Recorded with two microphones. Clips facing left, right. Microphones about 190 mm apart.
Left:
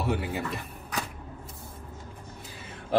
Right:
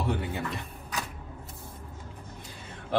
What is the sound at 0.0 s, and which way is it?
Speech, 5° left (ahead or behind).